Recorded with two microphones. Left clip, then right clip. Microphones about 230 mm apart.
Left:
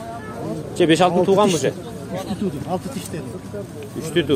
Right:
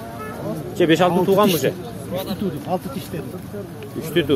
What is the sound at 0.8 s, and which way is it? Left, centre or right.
Speech, centre.